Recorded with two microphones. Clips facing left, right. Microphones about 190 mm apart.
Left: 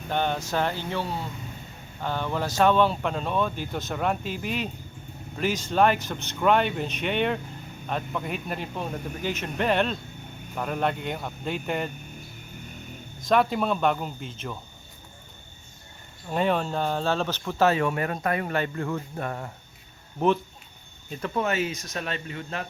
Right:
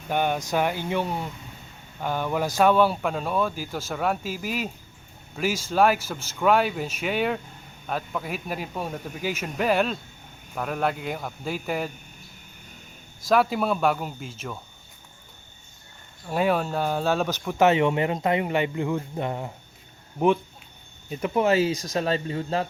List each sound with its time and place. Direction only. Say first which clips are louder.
0.1 s speech: right 2 dB; 10° right (ahead or behind)
13.2 s speech: right 1 dB; 5° right (ahead or behind)
16.3 s speech: right 1 dB; 5° right (ahead or behind)
21.4 s speech: right 6 dB; 30° right (ahead or behind)